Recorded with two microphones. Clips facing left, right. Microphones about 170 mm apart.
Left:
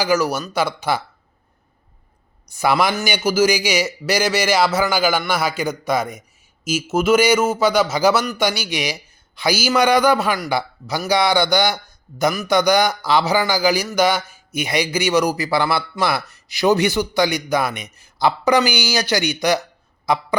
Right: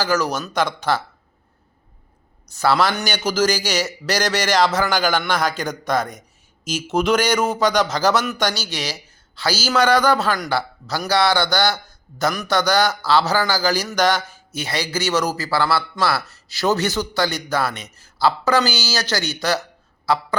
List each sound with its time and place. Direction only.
0.0 s a man's voice: 10° left (ahead or behind)
2.5 s a man's voice: 10° left (ahead or behind)